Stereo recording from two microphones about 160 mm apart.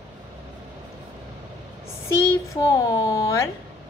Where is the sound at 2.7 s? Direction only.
20° left (ahead or behind).